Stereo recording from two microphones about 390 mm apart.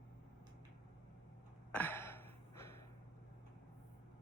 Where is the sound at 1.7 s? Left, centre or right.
Centre.